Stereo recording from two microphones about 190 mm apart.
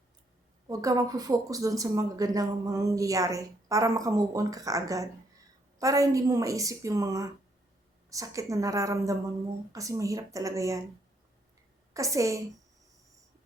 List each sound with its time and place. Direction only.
0.7 s speech: 15° right (ahead or behind)
11.9 s speech: 15° right (ahead or behind)